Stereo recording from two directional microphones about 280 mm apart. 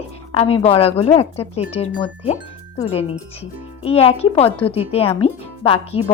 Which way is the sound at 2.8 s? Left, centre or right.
Left.